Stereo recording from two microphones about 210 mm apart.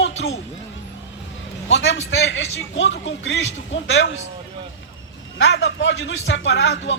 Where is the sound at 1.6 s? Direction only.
60° left (ahead or behind).